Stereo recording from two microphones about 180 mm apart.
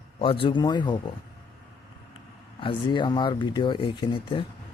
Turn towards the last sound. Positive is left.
turn(degrees=30)  # may be behind; listen again after turning